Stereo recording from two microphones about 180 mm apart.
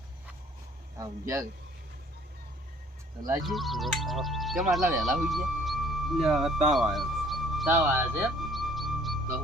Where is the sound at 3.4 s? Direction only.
Centre (ahead or behind).